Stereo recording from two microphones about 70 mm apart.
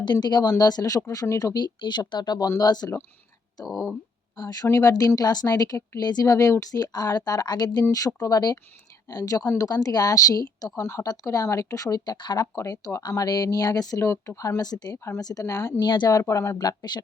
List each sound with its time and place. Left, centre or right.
0.0 s speech: left
1.6 s a woman's voice: left
3.7 s speech: centre
4.4 s speech: left
4.7 s speech: left
5.0 s a woman's voice: left
7.9 s speech: left
12.5 s speech: left
13.0 s speech: left
14.0 s speech: left
14.6 s a woman's voice: left
15.4 s speech: left
15.8 s speech: left
16.6 s speech: left